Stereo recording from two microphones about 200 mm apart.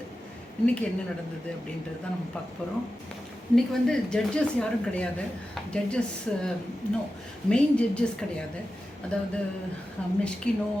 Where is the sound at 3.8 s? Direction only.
5° left (ahead or behind).